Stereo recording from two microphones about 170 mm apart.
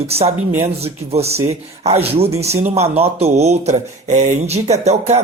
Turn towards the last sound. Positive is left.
turn(degrees=-40)  # may be behind; listen again after turning